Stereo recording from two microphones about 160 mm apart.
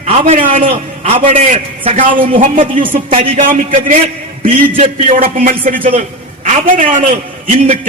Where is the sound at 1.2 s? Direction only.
50° right (ahead or behind).